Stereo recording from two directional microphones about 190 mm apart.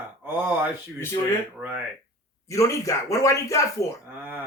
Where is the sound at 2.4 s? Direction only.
15° left (ahead or behind).